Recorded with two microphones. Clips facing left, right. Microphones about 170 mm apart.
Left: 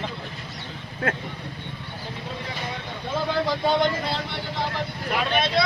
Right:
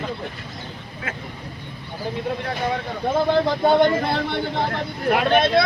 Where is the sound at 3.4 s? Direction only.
55° right (ahead or behind).